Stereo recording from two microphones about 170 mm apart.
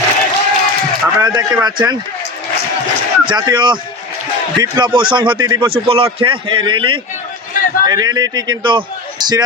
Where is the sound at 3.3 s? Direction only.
25° right (ahead or behind).